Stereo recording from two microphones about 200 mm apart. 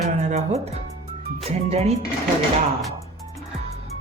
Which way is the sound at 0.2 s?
35° right (ahead or behind).